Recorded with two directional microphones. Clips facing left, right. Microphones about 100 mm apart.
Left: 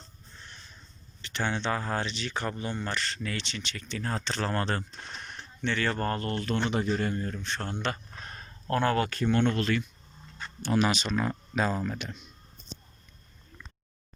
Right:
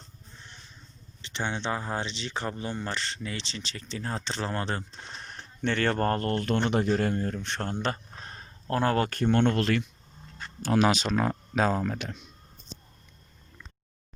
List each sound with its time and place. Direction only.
1.2 s speech: 25° right (ahead or behind)
5.2 s speech: 45° right (ahead or behind); by 7.3 s 65° right (ahead or behind)
7.6 s a sound: 40° right (ahead or behind)
9.0 s speech: 50° right (ahead or behind); by 12.1 s 75° right (ahead or behind)